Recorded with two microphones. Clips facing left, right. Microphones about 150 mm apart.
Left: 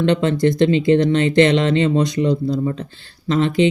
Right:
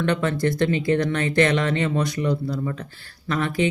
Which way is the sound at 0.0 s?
20° left (ahead or behind).